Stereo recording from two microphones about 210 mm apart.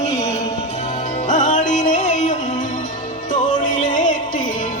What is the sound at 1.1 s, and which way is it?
Music, 35° left (ahead or behind).